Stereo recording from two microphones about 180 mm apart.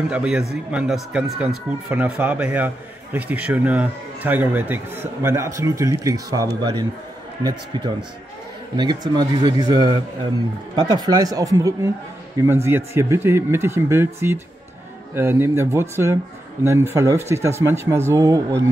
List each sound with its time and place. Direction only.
0.1 s a man's voice: 5° right (ahead or behind)